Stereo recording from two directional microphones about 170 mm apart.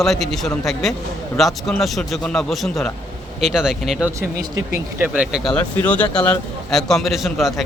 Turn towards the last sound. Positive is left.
turn(degrees=0)  # may be behind; listen again after turning